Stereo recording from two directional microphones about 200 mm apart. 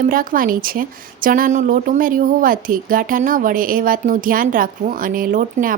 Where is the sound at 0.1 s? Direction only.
45° right (ahead or behind).